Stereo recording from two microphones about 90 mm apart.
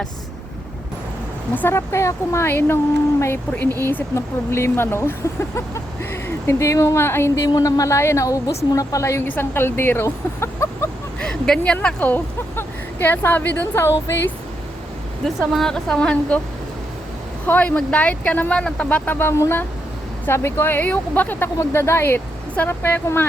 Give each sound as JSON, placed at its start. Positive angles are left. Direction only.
{"t": 1.5, "sound": "speech", "side_deg": 25}
{"t": 7.4, "sound": "a woman's voice", "side_deg": 40}
{"t": 9.2, "sound": "speech", "side_deg": 20}
{"t": 11.2, "sound": "speech", "side_deg": 5}
{"t": 15.2, "sound": "speech", "side_deg": 5}
{"t": 17.4, "sound": "speech", "side_deg": 20}